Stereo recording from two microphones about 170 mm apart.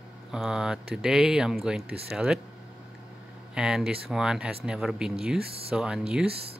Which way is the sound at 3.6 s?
5° right (ahead or behind).